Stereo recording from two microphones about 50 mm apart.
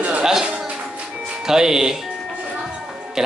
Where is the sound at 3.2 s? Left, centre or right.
Centre.